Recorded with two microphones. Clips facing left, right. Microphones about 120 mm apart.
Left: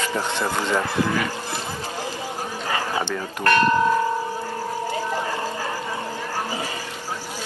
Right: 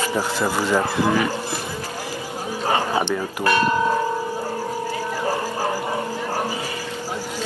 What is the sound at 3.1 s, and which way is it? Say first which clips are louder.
Speech: even; 10° right (ahead or behind).